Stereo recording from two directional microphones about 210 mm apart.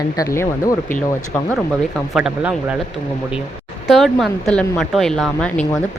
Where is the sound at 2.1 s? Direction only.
5° right (ahead or behind).